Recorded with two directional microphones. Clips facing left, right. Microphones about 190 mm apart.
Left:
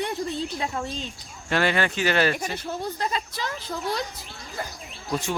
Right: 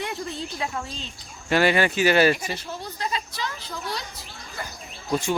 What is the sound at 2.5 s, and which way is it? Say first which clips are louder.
Speech: left 4 dB; 50° left (ahead or behind).